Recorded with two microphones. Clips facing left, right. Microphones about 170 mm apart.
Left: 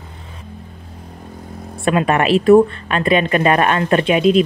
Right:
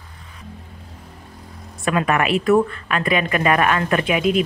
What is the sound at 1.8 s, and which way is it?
A woman's voice, 30° left (ahead or behind).